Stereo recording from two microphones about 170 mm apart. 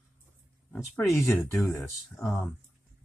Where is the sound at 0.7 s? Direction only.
15° left (ahead or behind).